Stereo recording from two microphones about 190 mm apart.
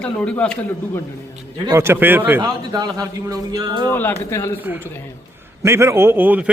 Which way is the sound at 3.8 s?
10° left (ahead or behind).